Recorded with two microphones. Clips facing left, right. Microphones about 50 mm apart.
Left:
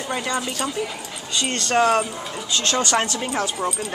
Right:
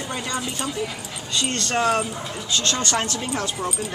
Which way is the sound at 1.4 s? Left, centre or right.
Centre.